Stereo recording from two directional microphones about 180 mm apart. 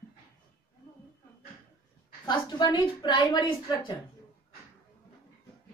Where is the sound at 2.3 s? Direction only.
25° left (ahead or behind).